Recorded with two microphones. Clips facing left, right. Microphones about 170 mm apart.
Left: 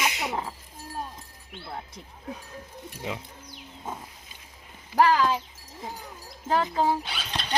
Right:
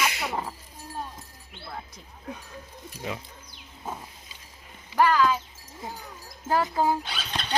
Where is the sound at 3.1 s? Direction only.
20° left (ahead or behind).